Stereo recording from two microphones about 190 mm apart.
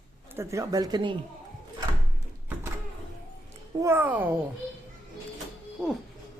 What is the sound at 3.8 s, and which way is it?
Speech, 10° right (ahead or behind).